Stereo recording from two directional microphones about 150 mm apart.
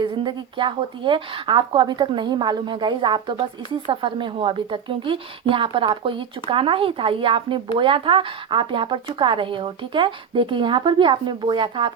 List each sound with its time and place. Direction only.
0.0 s speech: 35° right (ahead or behind)